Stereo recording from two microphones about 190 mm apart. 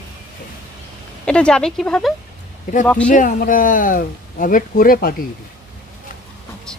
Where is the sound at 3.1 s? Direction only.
45° left (ahead or behind).